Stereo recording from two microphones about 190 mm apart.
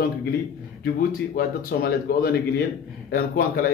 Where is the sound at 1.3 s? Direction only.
50° left (ahead or behind).